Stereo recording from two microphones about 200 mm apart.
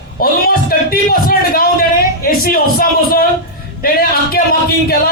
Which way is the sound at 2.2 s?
45° left (ahead or behind).